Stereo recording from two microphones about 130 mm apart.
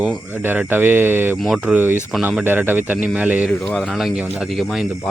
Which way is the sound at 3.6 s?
Centre (ahead or behind).